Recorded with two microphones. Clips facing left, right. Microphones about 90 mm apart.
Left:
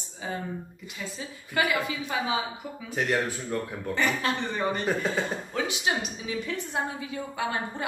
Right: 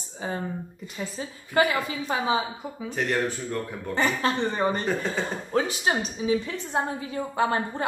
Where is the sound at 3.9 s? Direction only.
35° right (ahead or behind).